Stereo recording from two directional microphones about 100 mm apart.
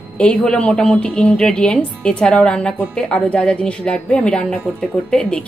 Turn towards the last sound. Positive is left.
turn(degrees=10)  # may be behind; listen again after turning